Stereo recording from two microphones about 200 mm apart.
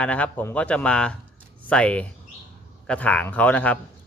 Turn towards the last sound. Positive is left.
turn(degrees=5)  # may be behind; listen again after turning